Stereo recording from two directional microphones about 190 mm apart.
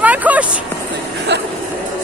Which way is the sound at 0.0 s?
10° right (ahead or behind).